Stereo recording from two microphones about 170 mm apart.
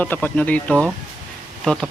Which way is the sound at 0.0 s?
10° left (ahead or behind).